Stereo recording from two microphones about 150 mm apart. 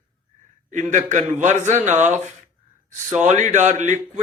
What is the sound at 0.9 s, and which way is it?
A man's voice, 55° right (ahead or behind).